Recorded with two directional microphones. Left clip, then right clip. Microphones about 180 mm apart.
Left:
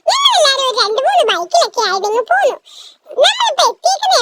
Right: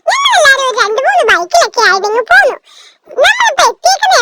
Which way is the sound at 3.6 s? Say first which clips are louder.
Right 4 dB; 20° right (ahead or behind).